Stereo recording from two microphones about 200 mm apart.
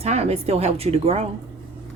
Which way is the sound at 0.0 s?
30° right (ahead or behind).